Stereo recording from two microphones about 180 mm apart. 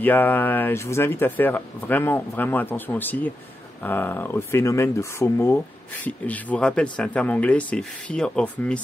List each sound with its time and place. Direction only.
0.0 s speech: 10° left (ahead or behind)